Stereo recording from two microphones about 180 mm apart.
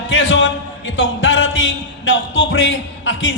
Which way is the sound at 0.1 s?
90° left.